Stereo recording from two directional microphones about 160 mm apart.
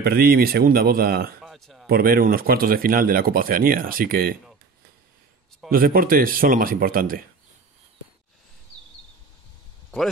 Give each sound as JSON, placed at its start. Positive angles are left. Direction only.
{"t": 0.0, "sound": "speech", "side_deg": -70}
{"t": 1.4, "sound": "a sound", "side_deg": 0}
{"t": 1.9, "sound": "speech", "side_deg": -70}
{"t": 5.7, "sound": "speech", "side_deg": -65}